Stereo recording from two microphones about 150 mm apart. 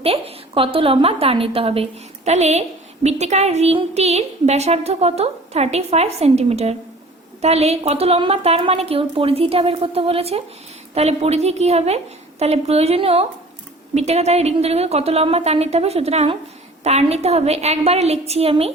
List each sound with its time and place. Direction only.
0.0 s a woman's voice: 40° right (ahead or behind)